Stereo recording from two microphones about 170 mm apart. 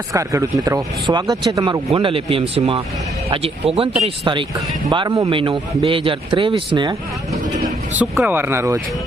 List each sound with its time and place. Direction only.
0.1 s speech: 20° right (ahead or behind)
1.9 s speech: 30° right (ahead or behind)
7.9 s speech: 10° right (ahead or behind)